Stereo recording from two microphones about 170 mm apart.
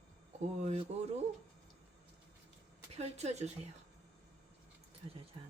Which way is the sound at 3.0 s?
40° right (ahead or behind).